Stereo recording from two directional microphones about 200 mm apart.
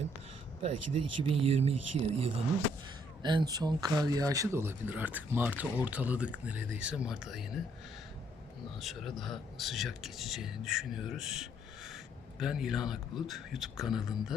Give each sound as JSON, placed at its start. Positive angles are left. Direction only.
{"t": 0.6, "sound": "speech", "side_deg": -30}
{"t": 8.8, "sound": "speech", "side_deg": 0}